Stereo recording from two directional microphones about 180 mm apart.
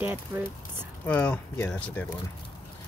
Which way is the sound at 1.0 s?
5° left (ahead or behind).